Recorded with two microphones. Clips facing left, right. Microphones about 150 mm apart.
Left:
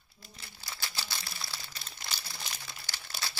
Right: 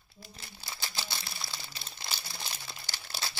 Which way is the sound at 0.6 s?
20° right (ahead or behind).